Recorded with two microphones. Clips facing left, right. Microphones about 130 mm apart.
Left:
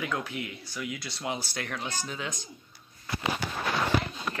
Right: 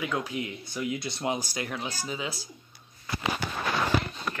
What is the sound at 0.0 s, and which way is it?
Speech, 15° right (ahead or behind).